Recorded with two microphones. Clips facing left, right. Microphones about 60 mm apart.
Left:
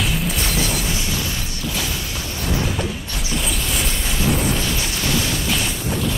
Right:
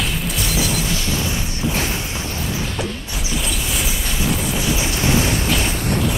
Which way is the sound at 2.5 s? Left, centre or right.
Centre.